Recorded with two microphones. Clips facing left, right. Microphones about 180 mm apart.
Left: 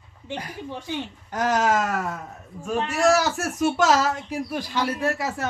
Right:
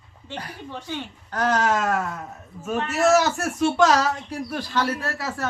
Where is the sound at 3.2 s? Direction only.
5° left (ahead or behind).